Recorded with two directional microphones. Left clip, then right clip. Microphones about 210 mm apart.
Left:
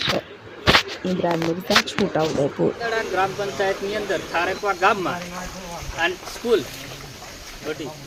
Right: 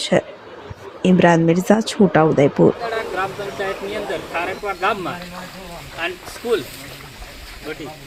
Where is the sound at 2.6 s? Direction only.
20° right (ahead or behind).